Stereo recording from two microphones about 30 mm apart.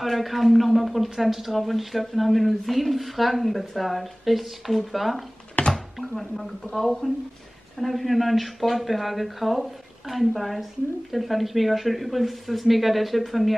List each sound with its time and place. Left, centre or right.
0.0 s speech: centre
5.6 s typing: left
5.9 s speech: centre